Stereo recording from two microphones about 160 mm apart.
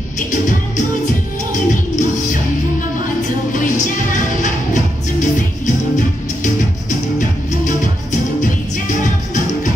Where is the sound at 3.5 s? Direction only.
55° left (ahead or behind).